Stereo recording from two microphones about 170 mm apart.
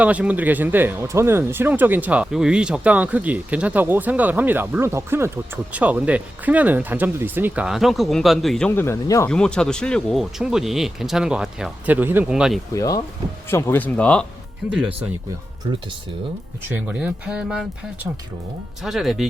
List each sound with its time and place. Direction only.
0.0 s speech: 10° right (ahead or behind); by 9.3 s 15° left (ahead or behind)
9.3 s speech: 5° left (ahead or behind)
12.7 s speech: 20° left (ahead or behind)
14.7 s speech: 5° right (ahead or behind)
16.6 s speech: 10° right (ahead or behind)
18.8 s speech: centre (ahead or behind)